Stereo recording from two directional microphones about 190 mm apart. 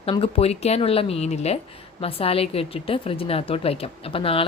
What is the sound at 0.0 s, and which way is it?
A woman's voice, 30° left (ahead or behind).